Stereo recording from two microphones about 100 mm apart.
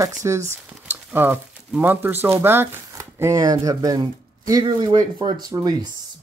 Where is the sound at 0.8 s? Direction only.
20° right (ahead or behind).